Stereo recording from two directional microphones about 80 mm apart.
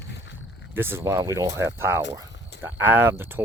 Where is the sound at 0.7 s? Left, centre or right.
Right.